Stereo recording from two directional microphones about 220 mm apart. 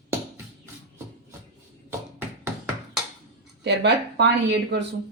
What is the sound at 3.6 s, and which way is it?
Speech, 50° right (ahead or behind).